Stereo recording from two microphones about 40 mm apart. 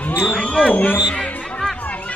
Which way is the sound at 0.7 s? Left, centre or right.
Left.